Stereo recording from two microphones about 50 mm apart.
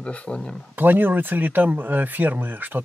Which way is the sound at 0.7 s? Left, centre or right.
Right.